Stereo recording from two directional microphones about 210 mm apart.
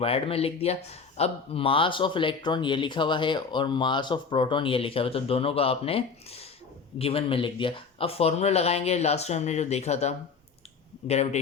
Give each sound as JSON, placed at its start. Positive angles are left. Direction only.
{"t": 0.0, "sound": "speech", "side_deg": 25}